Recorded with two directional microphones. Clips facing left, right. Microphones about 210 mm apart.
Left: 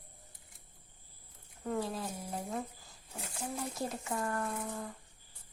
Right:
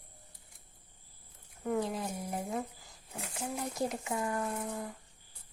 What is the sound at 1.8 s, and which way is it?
Speech, 15° right (ahead or behind).